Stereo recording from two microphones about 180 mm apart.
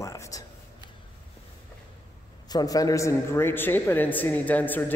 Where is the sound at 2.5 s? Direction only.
20° left (ahead or behind).